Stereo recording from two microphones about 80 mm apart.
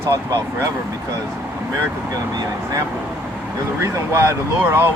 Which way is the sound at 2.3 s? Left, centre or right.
Right.